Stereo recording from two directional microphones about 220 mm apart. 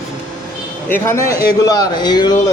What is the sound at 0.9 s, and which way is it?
A man's voice, 10° left (ahead or behind).